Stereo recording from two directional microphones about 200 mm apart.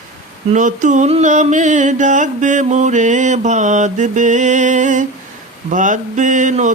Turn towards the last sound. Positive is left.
turn(degrees=-40)  # may be behind; listen again after turning